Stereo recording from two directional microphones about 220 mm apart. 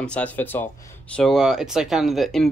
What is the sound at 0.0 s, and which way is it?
Speech, 5° left (ahead or behind).